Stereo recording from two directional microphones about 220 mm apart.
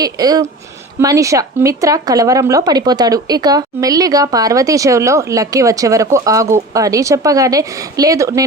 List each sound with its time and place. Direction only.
0.0 s speech: 15° right (ahead or behind)